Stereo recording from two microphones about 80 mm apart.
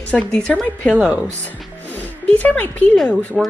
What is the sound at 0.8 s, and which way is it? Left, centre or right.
Speech, centre.